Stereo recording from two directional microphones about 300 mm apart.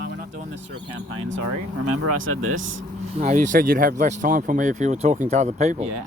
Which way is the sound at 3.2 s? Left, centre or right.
Right.